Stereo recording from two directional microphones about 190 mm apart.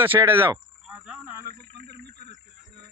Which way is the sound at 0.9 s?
5° right (ahead or behind).